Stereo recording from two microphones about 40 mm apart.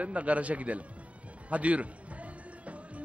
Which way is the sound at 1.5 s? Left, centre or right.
Right.